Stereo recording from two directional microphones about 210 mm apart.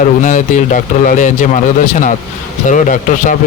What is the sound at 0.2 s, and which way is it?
Speech, 35° left (ahead or behind).